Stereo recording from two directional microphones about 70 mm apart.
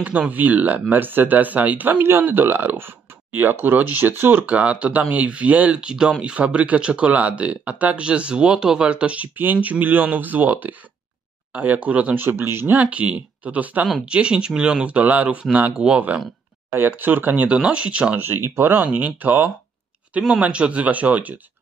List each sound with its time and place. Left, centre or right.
0.0 s speech: right
4.5 s speech: centre
16.7 s speech: right
18.2 s speech: right